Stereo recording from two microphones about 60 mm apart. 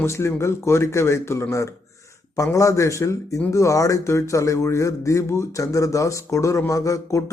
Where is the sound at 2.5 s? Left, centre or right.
Left.